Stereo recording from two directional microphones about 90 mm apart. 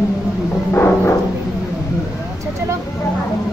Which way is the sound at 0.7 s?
25° left (ahead or behind).